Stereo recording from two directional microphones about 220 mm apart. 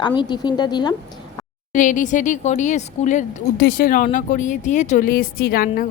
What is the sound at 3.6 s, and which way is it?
Speech, 45° left (ahead or behind).